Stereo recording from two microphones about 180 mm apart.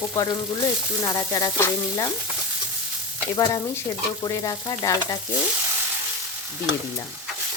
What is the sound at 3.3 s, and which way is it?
Stir, 20° left (ahead or behind).